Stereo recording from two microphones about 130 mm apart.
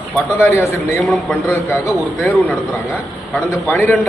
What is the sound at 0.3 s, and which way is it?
Speech, 20° left (ahead or behind).